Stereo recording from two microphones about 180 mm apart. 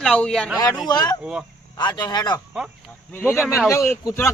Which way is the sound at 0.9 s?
20° left (ahead or behind).